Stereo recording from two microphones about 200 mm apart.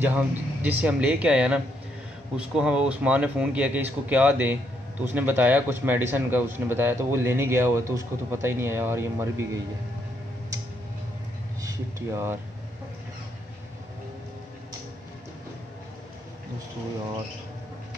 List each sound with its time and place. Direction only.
0.0 s a man's voice: 5° right (ahead or behind)
11.6 s speech: 15° right (ahead or behind)